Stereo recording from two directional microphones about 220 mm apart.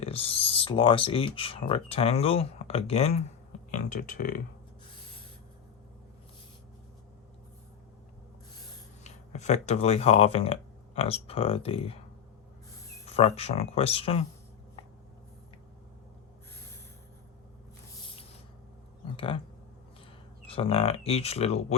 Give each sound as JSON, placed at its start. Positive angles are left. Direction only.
{"t": 0.0, "sound": "speech", "side_deg": 25}
{"t": 9.0, "sound": "speech", "side_deg": 30}
{"t": 13.1, "sound": "speech", "side_deg": 30}
{"t": 19.1, "sound": "speech", "side_deg": 25}
{"t": 20.5, "sound": "speech", "side_deg": 25}